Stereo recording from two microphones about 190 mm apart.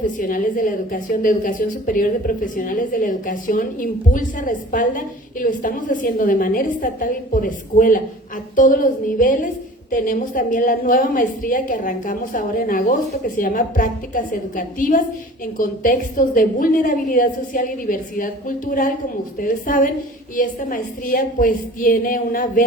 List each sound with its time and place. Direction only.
0.0 s a woman's voice: 45° left (ahead or behind)